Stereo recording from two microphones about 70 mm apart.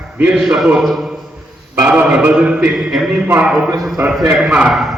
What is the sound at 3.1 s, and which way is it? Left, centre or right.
Speech, centre.